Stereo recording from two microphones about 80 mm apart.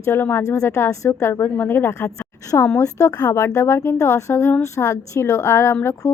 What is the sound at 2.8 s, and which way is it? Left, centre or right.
A woman's voice, left.